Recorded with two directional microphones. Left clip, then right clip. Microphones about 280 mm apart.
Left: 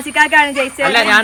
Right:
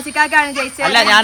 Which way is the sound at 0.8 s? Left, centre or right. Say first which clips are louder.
Right 1 dB; right.